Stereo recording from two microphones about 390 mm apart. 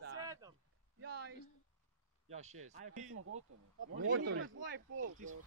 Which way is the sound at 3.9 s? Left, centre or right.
Right.